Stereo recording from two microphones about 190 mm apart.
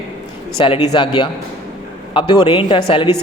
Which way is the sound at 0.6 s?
25° left (ahead or behind).